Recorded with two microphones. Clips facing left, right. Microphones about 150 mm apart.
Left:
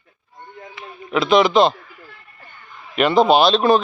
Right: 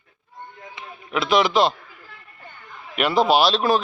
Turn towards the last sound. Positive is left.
turn(degrees=0)  # may be behind; listen again after turning